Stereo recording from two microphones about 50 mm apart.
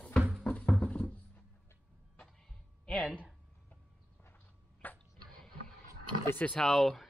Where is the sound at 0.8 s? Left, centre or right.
Left.